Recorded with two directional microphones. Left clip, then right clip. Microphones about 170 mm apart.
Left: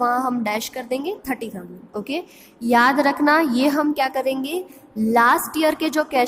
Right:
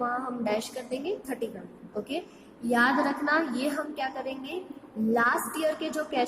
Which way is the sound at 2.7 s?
40° left (ahead or behind).